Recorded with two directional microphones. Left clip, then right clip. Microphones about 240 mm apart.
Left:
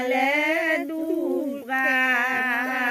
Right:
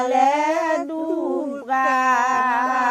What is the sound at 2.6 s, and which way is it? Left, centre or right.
Carnatic music, centre.